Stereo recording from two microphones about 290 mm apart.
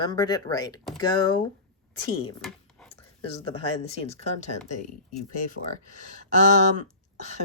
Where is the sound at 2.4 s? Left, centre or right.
Centre.